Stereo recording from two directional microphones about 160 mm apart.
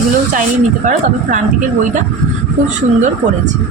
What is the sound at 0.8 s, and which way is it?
Speech, 50° right (ahead or behind).